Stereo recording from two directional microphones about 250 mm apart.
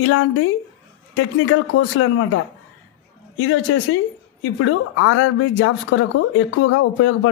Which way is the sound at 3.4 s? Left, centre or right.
Left.